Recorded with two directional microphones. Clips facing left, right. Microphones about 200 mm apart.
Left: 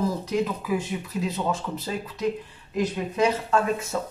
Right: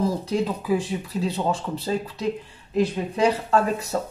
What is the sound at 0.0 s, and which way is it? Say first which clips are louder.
Speech: right 2 dB; 30° right (ahead or behind).